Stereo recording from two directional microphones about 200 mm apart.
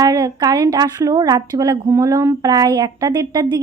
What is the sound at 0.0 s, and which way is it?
A woman's voice, 15° right (ahead or behind).